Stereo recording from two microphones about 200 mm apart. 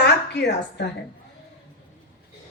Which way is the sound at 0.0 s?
60° left (ahead or behind).